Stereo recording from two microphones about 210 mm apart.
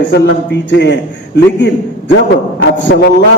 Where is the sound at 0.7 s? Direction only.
60° left (ahead or behind).